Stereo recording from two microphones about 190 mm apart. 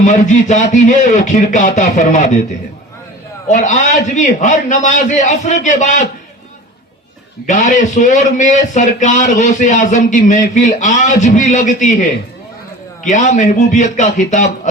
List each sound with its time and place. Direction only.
0.0 s a man's voice: 40° left (ahead or behind)
3.5 s a man's voice: 40° left (ahead or behind)
7.4 s a man's voice: 40° left (ahead or behind)
13.1 s a man's voice: 40° left (ahead or behind)